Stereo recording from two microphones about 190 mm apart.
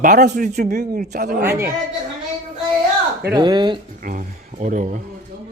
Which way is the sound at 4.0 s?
50° right (ahead or behind).